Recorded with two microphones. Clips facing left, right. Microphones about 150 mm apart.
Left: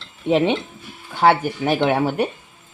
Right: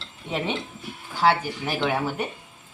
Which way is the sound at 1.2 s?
55° left (ahead or behind).